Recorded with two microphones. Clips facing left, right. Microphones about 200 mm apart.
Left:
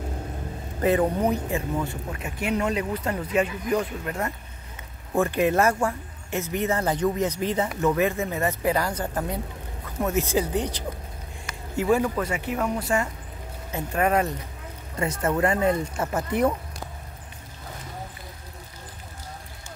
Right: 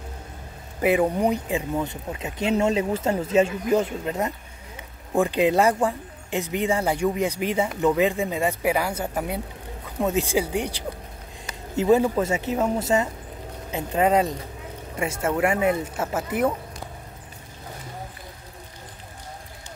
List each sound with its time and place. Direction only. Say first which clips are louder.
0.7 s speech: right 1 dB; 10° right (ahead or behind)
11.7 s speech: right 4 dB; 20° right (ahead or behind)
15.0 s speech: even; 10° right (ahead or behind)